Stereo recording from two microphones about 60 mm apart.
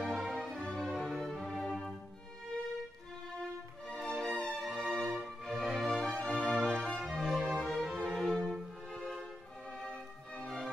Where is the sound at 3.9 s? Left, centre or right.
Centre.